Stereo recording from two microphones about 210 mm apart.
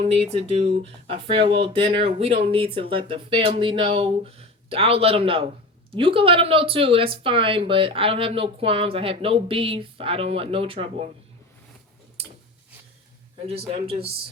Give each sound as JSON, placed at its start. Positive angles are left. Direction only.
{"t": 0.0, "sound": "speech", "side_deg": -30}
{"t": 13.5, "sound": "speech", "side_deg": -25}